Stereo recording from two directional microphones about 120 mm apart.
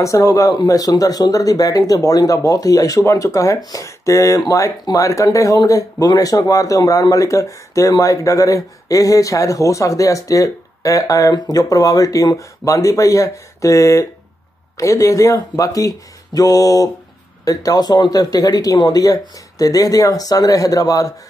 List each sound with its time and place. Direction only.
0.0 s speech: 30° left (ahead or behind)